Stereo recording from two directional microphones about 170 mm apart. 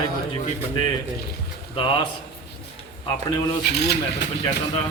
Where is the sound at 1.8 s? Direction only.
30° left (ahead or behind).